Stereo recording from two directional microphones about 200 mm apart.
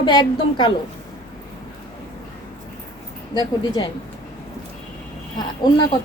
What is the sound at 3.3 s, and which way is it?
Speech, 20° left (ahead or behind).